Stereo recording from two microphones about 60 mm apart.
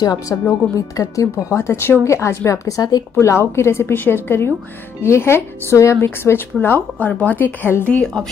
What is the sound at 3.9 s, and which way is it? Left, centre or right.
A woman's voice, left.